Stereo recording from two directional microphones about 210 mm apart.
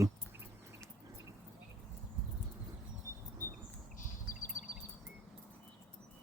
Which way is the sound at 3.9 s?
40° left (ahead or behind).